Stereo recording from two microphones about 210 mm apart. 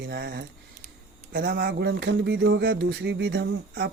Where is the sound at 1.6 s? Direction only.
50° right (ahead or behind).